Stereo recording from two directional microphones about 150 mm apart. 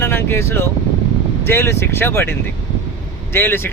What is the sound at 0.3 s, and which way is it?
Speech, 15° left (ahead or behind).